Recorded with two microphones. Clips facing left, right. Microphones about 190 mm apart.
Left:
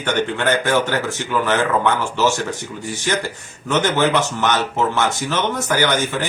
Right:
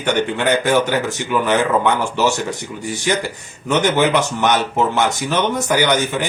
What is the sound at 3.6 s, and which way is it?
Speech, 15° right (ahead or behind).